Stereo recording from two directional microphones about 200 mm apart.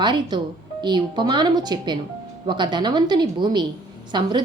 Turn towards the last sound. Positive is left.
turn(degrees=-20)  # may be behind; listen again after turning